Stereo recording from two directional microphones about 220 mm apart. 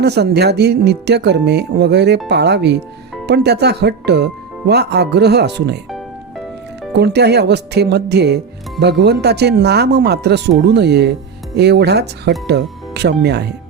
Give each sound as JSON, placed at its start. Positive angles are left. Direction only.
{"t": 0.0, "sound": "speech", "side_deg": -50}
{"t": 6.9, "sound": "speech", "side_deg": -50}